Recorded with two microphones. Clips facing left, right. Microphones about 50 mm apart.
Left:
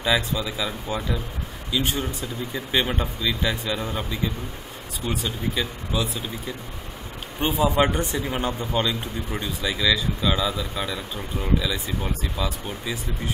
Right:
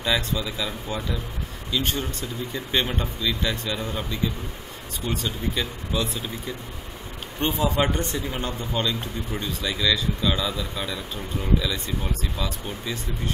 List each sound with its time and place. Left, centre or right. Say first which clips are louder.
0.0 s speech: left 2 dB; centre